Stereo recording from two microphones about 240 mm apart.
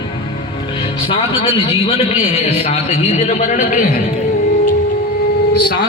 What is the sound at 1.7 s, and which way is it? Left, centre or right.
A man's voice, left.